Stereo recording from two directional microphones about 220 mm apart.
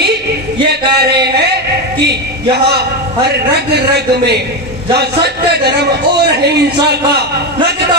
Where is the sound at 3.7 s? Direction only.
50° right (ahead or behind).